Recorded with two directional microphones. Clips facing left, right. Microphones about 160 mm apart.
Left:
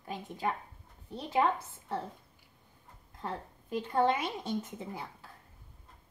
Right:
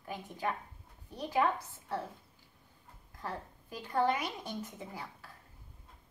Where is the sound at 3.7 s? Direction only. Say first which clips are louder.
Left 3 dB; 25° left (ahead or behind).